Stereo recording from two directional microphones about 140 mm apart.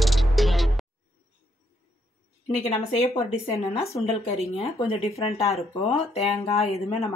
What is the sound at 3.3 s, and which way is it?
Speech, 45° left (ahead or behind).